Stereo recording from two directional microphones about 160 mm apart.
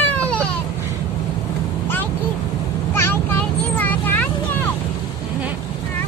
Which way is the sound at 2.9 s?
15° left (ahead or behind).